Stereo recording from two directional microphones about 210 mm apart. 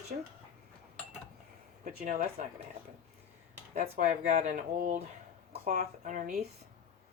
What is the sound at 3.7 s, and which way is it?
Speech, 35° right (ahead or behind).